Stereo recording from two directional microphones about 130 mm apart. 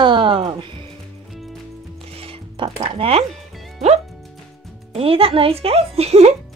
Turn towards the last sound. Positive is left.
turn(degrees=-55)  # may be behind; listen again after turning